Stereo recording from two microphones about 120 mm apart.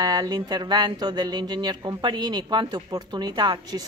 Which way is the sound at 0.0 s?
35° right (ahead or behind).